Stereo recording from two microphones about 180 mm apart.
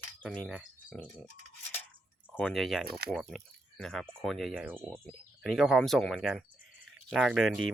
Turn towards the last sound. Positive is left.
turn(degrees=0)  # may be behind; listen again after turning